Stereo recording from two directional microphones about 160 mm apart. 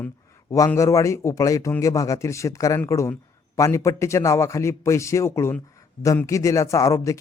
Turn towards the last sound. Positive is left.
turn(degrees=20)  # may be behind; listen again after turning